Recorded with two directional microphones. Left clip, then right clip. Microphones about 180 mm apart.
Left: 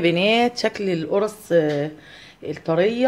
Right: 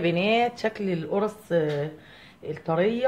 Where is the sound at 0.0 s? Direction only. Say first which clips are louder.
Left 5 dB; 50° left (ahead or behind).